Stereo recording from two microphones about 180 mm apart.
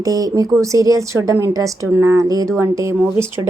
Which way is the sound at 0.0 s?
20° right (ahead or behind).